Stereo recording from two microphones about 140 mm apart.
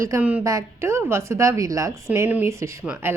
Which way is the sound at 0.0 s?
15° right (ahead or behind).